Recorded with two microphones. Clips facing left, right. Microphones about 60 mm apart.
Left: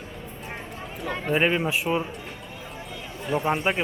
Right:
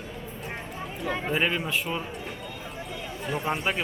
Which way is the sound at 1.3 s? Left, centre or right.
Centre.